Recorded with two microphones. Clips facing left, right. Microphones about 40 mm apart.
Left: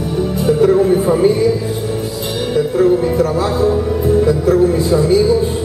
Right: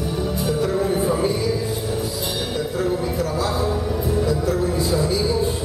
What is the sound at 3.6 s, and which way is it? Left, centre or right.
Music, centre.